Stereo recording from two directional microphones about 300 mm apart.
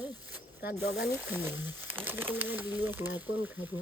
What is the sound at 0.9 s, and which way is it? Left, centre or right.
Speech, left.